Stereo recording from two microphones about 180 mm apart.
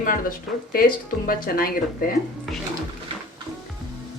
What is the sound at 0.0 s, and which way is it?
Speech, 50° left (ahead or behind).